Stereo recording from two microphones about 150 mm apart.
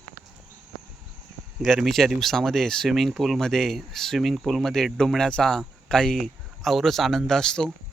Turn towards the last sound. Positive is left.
turn(degrees=5)  # may be behind; listen again after turning